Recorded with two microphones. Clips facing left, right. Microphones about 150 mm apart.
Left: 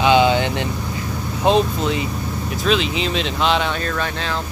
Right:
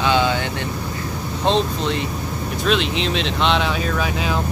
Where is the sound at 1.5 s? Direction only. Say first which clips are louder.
Left 3 dB; 10° left (ahead or behind).